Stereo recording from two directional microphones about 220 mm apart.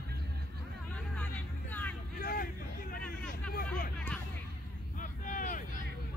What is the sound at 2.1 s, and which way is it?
Vehicle, 45° left (ahead or behind).